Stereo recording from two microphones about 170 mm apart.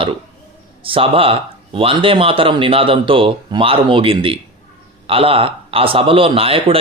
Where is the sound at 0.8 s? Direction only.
30° right (ahead or behind).